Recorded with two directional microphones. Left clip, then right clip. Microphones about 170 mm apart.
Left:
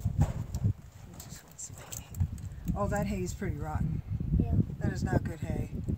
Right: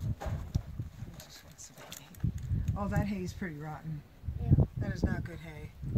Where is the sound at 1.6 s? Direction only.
55° left (ahead or behind).